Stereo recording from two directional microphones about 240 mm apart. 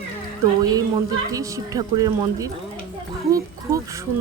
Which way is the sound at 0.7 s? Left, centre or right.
Centre.